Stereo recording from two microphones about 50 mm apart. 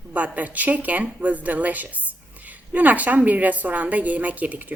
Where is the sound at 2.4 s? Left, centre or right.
Right.